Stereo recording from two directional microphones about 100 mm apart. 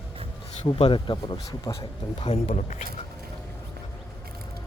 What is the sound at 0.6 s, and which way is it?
Speech, 60° left (ahead or behind).